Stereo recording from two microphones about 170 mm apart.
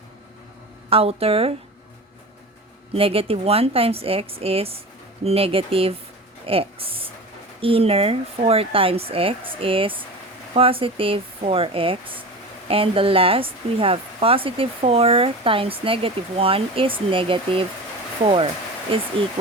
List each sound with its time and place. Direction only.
0.9 s speech: 35° right (ahead or behind)
2.9 s speech: 35° right (ahead or behind)